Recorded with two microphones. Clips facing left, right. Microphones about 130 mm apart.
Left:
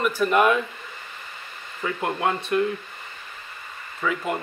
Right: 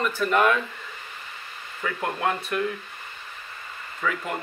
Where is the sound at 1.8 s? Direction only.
20° left (ahead or behind).